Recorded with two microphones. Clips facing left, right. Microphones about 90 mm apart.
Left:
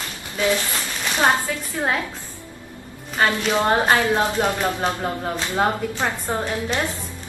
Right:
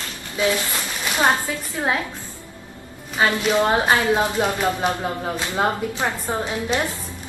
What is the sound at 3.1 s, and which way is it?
A woman's voice, centre (ahead or behind).